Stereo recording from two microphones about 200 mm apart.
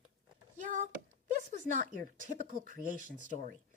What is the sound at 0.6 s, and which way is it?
Speech, 40° right (ahead or behind).